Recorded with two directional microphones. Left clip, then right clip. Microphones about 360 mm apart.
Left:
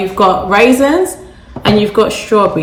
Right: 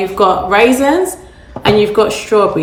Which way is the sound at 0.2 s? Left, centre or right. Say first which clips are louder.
Left 1 dB; centre.